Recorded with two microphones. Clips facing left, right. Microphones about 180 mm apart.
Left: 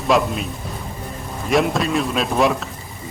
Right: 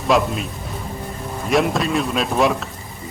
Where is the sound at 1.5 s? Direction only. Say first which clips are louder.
Even; centre (ahead or behind).